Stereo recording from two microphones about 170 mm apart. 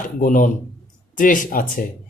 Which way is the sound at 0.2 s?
50° left (ahead or behind).